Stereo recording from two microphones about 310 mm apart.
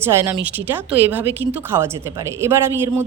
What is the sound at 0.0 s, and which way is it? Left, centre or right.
A woman's voice, centre.